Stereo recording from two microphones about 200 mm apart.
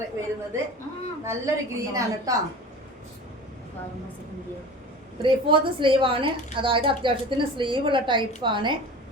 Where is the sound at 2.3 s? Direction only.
15° right (ahead or behind).